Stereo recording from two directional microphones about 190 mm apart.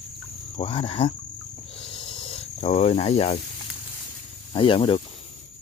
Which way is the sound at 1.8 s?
25° left (ahead or behind).